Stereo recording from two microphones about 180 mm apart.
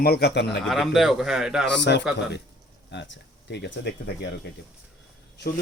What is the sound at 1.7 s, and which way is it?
Speech, 70° left (ahead or behind).